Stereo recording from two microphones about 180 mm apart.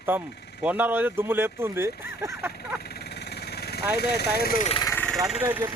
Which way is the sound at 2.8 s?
60° left (ahead or behind).